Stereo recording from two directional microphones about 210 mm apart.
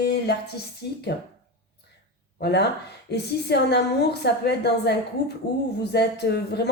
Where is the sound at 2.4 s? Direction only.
50° left (ahead or behind).